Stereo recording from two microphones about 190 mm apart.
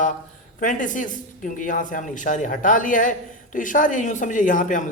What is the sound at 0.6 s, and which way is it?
Speech, 45° left (ahead or behind).